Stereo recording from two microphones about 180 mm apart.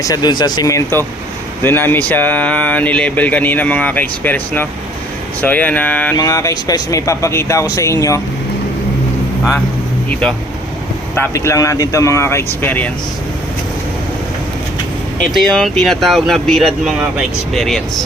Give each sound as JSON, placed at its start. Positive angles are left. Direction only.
{"t": 0.0, "sound": "speech", "side_deg": 20}
{"t": 6.1, "sound": "speech", "side_deg": 20}
{"t": 10.1, "sound": "speech", "side_deg": 5}
{"t": 15.2, "sound": "speech", "side_deg": 0}